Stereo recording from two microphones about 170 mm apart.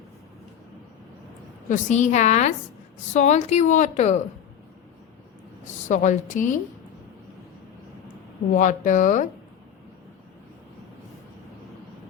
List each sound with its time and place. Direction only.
1.7 s a woman's voice: 45° left (ahead or behind)
5.9 s a woman's voice: 45° left (ahead or behind)
8.5 s a woman's voice: 50° left (ahead or behind)